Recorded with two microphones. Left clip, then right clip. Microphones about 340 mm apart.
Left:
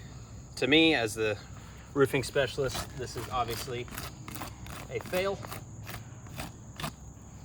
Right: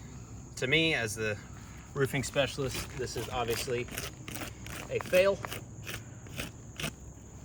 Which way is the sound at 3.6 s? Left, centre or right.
Centre.